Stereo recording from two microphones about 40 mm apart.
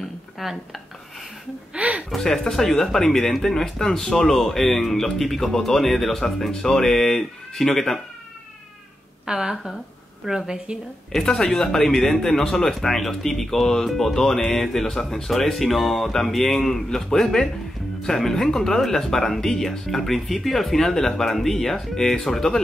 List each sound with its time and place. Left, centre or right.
1.8 s a sound: right
2.0 s speech: centre
9.2 s a woman's voice: right
11.1 s speech: centre